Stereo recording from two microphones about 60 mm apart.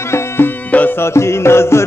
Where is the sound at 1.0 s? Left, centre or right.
Left.